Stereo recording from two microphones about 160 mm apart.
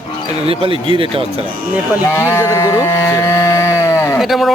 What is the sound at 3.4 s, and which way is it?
Sheep, 20° left (ahead or behind).